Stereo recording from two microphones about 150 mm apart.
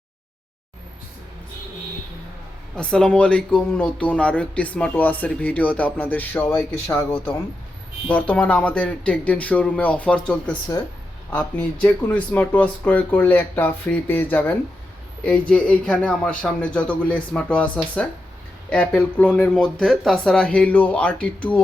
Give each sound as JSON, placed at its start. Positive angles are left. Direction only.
{"t": 2.7, "sound": "speech", "side_deg": 5}